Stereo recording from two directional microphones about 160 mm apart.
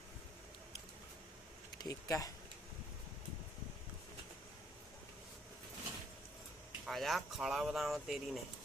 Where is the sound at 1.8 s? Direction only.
20° left (ahead or behind).